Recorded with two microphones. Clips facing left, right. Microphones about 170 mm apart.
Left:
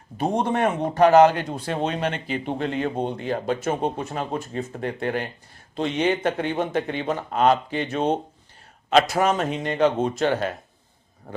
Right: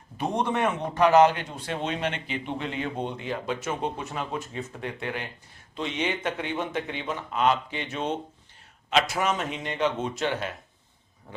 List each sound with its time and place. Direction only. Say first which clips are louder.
0.2 s a man's voice: left 4 dB; 40° left (ahead or behind)